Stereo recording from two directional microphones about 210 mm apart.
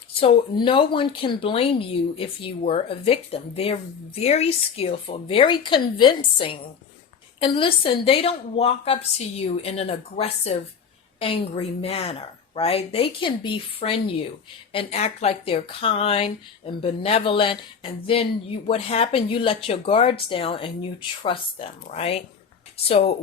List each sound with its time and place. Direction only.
0.2 s a woman's voice: 25° left (ahead or behind)